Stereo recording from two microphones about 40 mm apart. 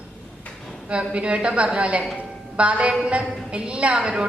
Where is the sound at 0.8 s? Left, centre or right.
Right.